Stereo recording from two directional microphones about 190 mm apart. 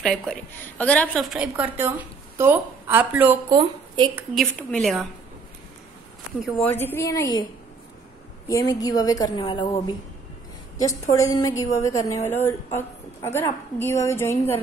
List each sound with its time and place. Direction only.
0.0 s a woman's voice: 5° left (ahead or behind)
1.4 s a woman's voice: 10° right (ahead or behind)
3.4 s a woman's voice: 25° right (ahead or behind)
4.4 s a woman's voice: 5° left (ahead or behind)
6.7 s a woman's voice: 10° left (ahead or behind)
8.5 s a woman's voice: 15° left (ahead or behind)